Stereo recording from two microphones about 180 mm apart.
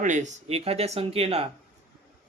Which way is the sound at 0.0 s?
40° right (ahead or behind).